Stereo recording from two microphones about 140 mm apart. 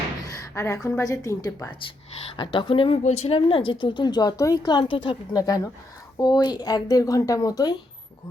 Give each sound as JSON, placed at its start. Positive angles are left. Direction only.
{"t": 0.5, "sound": "speech", "side_deg": 20}
{"t": 2.3, "sound": "speech", "side_deg": 35}
{"t": 5.4, "sound": "speech", "side_deg": 25}